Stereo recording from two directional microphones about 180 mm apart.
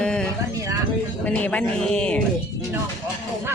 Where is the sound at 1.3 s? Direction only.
10° left (ahead or behind).